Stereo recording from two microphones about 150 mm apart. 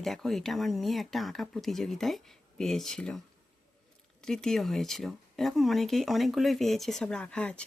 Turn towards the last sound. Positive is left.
turn(degrees=10)  # may be behind; listen again after turning